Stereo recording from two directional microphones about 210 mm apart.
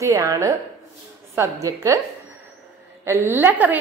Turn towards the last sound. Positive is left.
turn(degrees=-10)  # may be behind; listen again after turning